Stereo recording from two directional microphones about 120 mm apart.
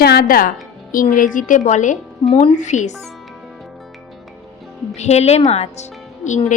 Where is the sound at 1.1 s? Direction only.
90° left.